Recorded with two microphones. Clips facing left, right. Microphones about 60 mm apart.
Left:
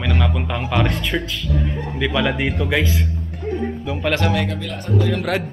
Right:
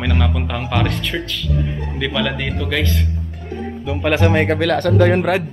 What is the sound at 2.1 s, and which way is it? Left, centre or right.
Speech, centre.